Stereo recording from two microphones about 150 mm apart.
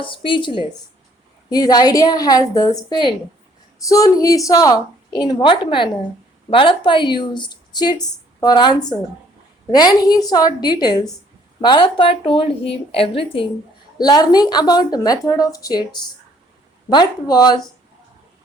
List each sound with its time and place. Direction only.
0.0 s a woman's voice: 35° left (ahead or behind)
9.7 s a woman's voice: 25° left (ahead or behind)
14.0 s a woman's voice: 25° left (ahead or behind)